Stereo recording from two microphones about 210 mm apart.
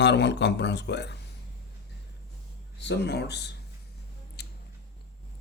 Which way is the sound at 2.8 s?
55° left (ahead or behind).